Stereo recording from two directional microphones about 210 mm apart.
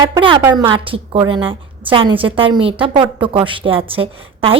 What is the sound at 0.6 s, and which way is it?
A woman's voice, 25° right (ahead or behind).